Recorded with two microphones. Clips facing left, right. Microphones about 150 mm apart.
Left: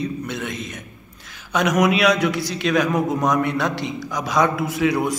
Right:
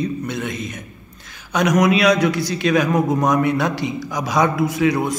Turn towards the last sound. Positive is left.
turn(degrees=5)  # may be behind; listen again after turning